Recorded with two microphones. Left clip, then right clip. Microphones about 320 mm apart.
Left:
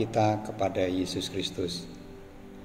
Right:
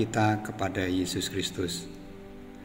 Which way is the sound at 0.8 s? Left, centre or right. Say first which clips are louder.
Left 1 dB; right.